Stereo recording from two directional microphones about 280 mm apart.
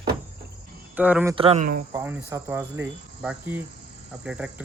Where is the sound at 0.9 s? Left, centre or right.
Centre.